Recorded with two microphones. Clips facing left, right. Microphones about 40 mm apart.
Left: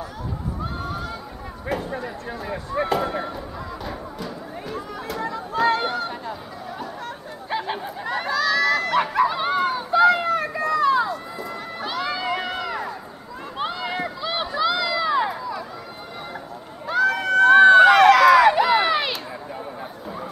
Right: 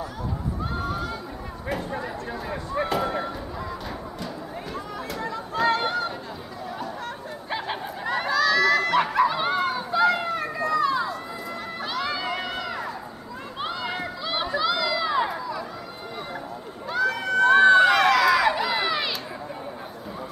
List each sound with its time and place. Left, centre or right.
0.7 s neigh: centre
1.7 s speech: centre
4.7 s chatter: centre
7.4 s a sound: centre
11.8 s crowd: centre
13.6 s run: centre
17.0 s run: centre
18.1 s crowd: left